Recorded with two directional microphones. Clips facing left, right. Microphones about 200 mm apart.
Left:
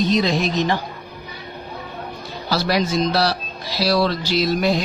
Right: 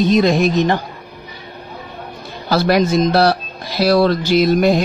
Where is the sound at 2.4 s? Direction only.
55° right (ahead or behind).